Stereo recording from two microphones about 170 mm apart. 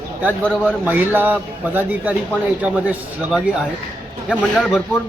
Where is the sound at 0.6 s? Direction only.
10° right (ahead or behind).